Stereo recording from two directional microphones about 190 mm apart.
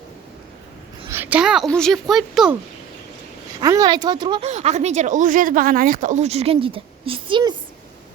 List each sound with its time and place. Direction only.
1.1 s speech: 10° right (ahead or behind)
3.6 s speech: 20° right (ahead or behind)
4.4 s speech: 35° right (ahead or behind)